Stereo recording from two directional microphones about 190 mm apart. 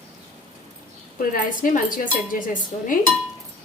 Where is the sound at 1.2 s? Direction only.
45° left (ahead or behind).